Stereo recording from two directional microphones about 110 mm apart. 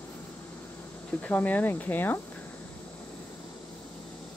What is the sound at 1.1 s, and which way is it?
Speech, 15° left (ahead or behind).